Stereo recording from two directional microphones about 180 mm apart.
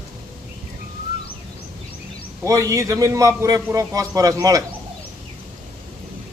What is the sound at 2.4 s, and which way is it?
A man's voice, 15° right (ahead or behind).